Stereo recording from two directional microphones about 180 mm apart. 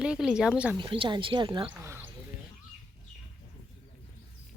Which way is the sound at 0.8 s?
25° right (ahead or behind).